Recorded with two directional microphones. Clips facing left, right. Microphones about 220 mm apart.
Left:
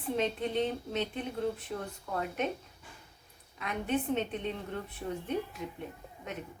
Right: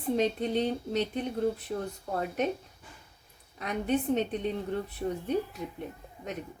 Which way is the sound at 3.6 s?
40° right (ahead or behind).